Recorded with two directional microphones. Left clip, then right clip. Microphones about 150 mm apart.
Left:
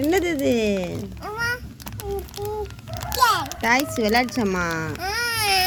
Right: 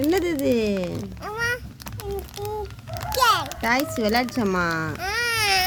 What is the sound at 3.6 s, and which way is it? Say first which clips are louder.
A child's voice: left 2 dB; 20° right (ahead or behind).